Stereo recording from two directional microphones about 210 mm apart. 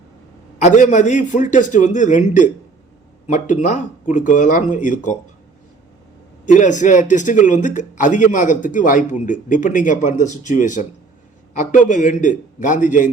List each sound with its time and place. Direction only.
0.6 s a man's voice: 35° left (ahead or behind)
6.4 s a man's voice: 35° left (ahead or behind)